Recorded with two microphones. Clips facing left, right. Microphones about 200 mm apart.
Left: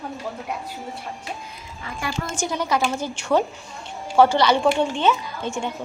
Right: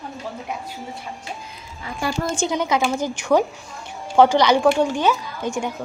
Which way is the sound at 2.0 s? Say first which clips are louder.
Right 5 dB; 35° right (ahead or behind).